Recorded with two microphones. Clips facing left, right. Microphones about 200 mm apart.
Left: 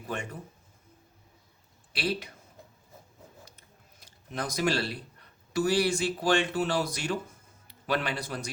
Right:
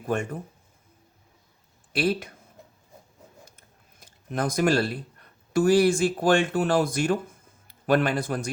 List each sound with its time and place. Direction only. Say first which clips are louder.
0.0 s speech: right 8 dB; 50° right (ahead or behind)
1.9 s speech: right 6 dB; 50° right (ahead or behind)
4.0 s a man's voice: right 7 dB; 50° right (ahead or behind)